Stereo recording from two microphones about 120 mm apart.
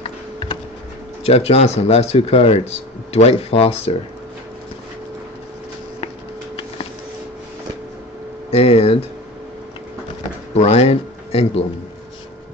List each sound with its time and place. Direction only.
1.2 s speech: 60° left (ahead or behind)
8.5 s speech: 60° left (ahead or behind)
10.5 s speech: 60° left (ahead or behind)